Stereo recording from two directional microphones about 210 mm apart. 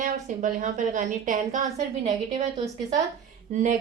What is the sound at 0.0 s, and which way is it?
A woman's voice, 35° right (ahead or behind).